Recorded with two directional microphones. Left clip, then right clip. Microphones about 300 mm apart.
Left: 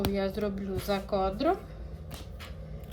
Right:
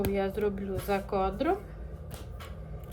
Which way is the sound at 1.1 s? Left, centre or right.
Centre.